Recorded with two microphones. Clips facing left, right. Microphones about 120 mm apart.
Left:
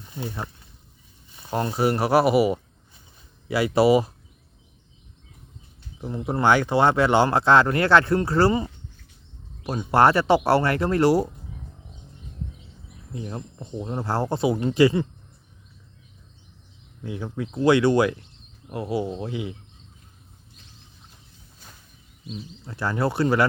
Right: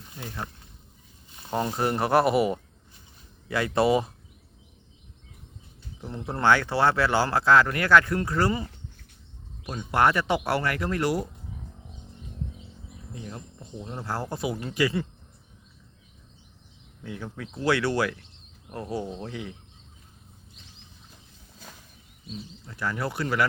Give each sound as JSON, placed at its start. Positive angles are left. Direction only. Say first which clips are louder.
{"t": 1.5, "sound": "speech", "louder": "left 3 dB", "side_deg": 5}
{"t": 6.0, "sound": "speech", "louder": "left 4 dB", "side_deg": 10}
{"t": 13.1, "sound": "speech", "louder": "left 7 dB", "side_deg": 30}
{"t": 17.0, "sound": "speech", "louder": "left 6 dB", "side_deg": 15}
{"t": 22.6, "sound": "speech", "louder": "left 6 dB", "side_deg": 30}